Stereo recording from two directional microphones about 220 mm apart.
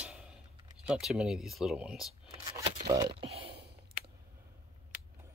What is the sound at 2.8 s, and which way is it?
Speech, 20° right (ahead or behind).